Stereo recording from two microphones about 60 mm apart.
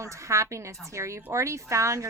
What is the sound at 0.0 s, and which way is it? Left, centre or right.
A woman's voice, right.